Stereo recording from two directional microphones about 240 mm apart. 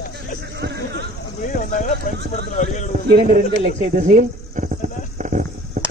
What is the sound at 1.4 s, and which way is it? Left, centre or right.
Clip-clop, left.